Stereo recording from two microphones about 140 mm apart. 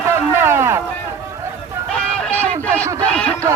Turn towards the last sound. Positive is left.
turn(degrees=10)  # may be behind; listen again after turning